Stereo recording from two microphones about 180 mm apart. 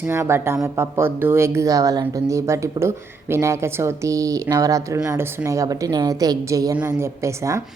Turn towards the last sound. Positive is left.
turn(degrees=-15)  # may be behind; listen again after turning